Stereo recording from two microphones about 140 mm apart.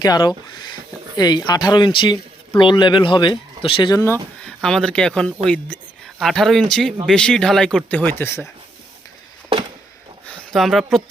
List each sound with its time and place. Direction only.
0.0 s speech: 30° left (ahead or behind)
3.9 s speech: 20° left (ahead or behind)
4.4 s speech: 5° left (ahead or behind)
10.2 s speech: centre (ahead or behind)